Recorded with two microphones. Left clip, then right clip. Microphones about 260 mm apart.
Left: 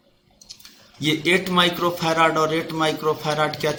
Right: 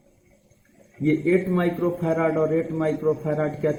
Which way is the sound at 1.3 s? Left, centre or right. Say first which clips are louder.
Left 7 dB; left.